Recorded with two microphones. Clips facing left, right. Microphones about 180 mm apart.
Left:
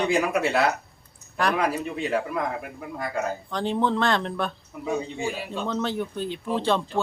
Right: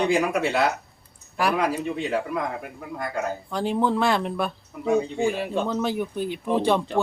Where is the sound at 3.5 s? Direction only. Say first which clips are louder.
Right 2 dB; 10° right (ahead or behind).